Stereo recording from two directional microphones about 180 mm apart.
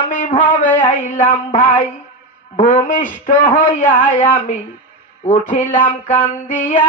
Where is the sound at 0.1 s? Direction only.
45° left (ahead or behind).